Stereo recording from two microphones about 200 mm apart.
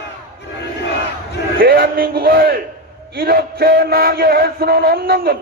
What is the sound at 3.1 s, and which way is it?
Music, 50° right (ahead or behind).